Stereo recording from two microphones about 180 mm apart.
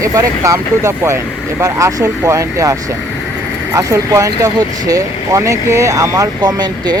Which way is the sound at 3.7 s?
20° right (ahead or behind).